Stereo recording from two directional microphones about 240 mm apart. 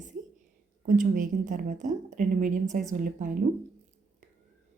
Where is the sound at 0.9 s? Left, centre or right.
Right.